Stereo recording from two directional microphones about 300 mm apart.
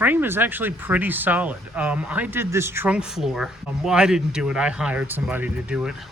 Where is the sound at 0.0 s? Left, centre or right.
Centre.